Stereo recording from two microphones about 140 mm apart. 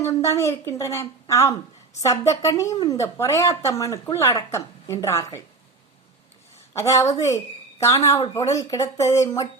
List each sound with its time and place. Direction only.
0.0 s a woman's voice: 20° left (ahead or behind)
6.7 s a woman's voice: 20° left (ahead or behind)